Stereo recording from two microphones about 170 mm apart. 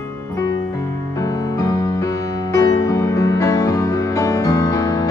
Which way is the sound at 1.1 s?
20° left (ahead or behind).